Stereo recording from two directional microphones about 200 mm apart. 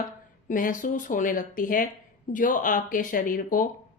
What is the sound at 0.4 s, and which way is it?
A woman's voice, 40° left (ahead or behind).